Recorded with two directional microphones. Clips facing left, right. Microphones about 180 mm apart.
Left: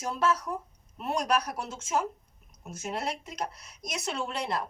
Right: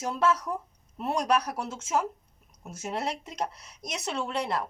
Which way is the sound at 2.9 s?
25° right (ahead or behind).